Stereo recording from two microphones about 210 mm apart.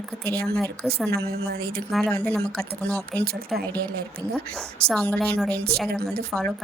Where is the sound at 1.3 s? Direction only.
50° right (ahead or behind).